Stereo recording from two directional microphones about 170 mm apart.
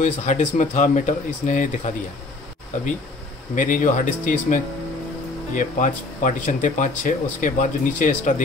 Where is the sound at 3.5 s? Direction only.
50° left (ahead or behind).